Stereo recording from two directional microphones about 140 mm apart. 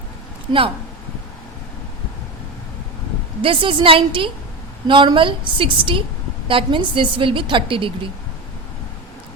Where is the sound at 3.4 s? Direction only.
40° right (ahead or behind).